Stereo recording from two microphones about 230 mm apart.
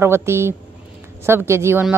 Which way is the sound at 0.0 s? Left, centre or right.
Centre.